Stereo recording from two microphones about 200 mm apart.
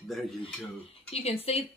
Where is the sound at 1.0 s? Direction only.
30° left (ahead or behind).